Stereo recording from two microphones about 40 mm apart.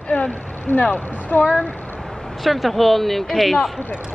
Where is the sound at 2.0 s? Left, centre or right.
Centre.